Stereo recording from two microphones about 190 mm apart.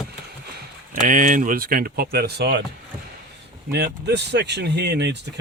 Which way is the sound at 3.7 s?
60° right (ahead or behind).